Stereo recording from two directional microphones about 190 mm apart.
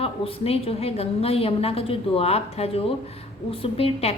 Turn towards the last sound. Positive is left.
turn(degrees=30)  # may be behind; listen again after turning